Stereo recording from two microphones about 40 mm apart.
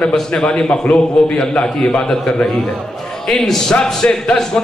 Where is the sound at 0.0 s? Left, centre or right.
Centre.